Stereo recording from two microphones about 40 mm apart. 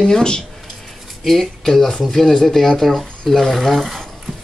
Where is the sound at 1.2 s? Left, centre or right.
Centre.